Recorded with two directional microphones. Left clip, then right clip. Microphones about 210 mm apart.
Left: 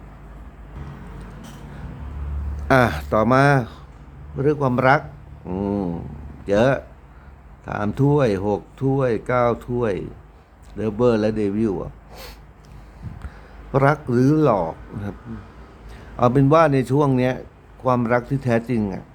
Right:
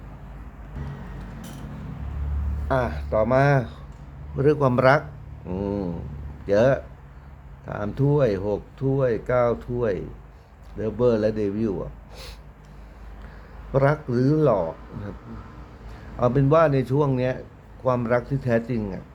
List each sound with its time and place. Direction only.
2.6 s speech: 40° left (ahead or behind); by 3.8 s 15° left (ahead or behind)
4.4 s a man's voice: centre (ahead or behind); by 12.3 s 15° left (ahead or behind)
13.7 s speech: 15° left (ahead or behind)
16.1 s speech: 15° left (ahead or behind)